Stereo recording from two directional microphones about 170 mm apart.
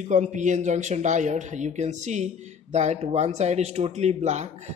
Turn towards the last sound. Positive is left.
turn(degrees=-40)  # may be behind; listen again after turning